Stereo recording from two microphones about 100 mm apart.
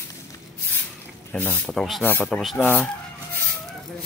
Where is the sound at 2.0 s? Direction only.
15° left (ahead or behind).